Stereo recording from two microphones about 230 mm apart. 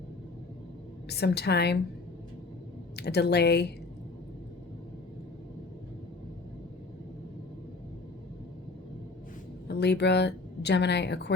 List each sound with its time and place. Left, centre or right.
1.1 s a woman's voice: left
2.9 s a woman's voice: left
9.6 s a woman's voice: left